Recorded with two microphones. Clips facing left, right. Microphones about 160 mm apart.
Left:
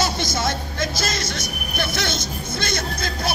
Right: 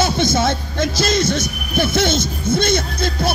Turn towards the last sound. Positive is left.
turn(degrees=-25)  # may be behind; listen again after turning